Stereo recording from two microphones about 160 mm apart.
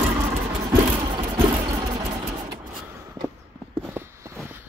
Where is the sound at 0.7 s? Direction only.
25° right (ahead or behind).